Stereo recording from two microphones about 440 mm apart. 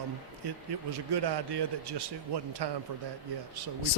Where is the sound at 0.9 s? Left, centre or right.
Right.